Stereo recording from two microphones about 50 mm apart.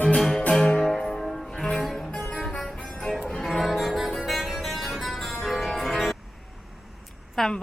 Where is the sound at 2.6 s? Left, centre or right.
Centre.